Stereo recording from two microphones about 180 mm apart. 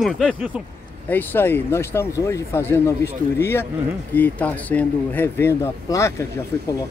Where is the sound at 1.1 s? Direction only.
10° left (ahead or behind).